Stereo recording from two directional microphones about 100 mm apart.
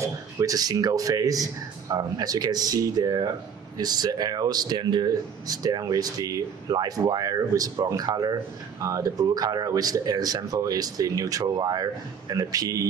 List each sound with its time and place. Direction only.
0.0 s speech: 35° right (ahead or behind)